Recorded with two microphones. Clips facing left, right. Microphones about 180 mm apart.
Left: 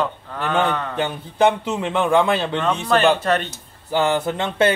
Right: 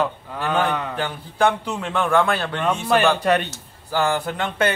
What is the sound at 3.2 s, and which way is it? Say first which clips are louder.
Speech: right 1 dB; 15° right (ahead or behind).